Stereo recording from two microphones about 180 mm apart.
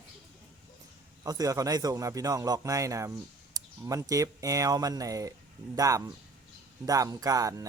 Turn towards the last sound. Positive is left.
turn(degrees=-20)  # may be behind; listen again after turning